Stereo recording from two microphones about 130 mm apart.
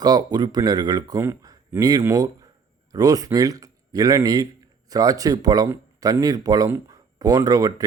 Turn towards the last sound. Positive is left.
turn(degrees=-30)  # may be behind; listen again after turning